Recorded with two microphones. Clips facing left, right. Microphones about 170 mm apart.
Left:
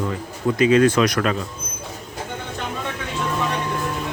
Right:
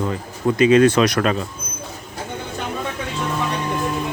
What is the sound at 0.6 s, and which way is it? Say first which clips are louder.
Speech: right 2 dB; 20° right (ahead or behind).